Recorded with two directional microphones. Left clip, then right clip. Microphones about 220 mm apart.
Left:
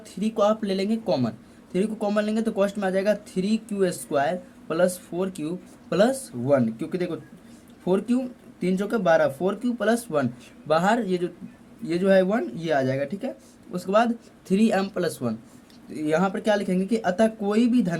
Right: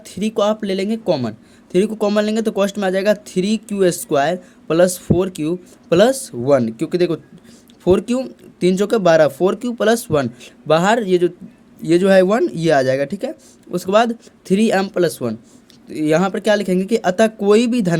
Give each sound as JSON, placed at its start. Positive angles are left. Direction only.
{"t": 0.0, "sound": "speech", "side_deg": -40}